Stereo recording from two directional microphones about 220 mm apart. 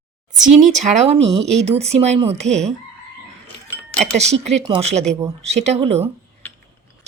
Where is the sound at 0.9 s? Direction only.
30° right (ahead or behind).